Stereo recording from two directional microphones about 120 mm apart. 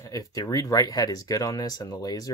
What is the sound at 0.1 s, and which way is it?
Speech, 30° left (ahead or behind).